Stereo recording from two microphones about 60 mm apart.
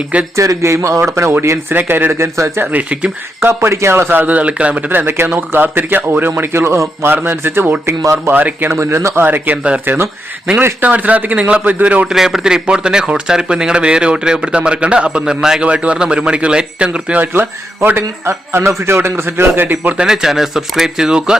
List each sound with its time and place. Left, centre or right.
0.3 s a man's voice: right
4.9 s a man's voice: right
7.1 s a man's voice: right
8.3 s a man's voice: right
8.7 s speech: right
9.2 s a man's voice: right
10.6 s a man's voice: right
12.0 s speech: centre
15.6 s a man's voice: right
17.8 s speech: right
20.0 s speech: centre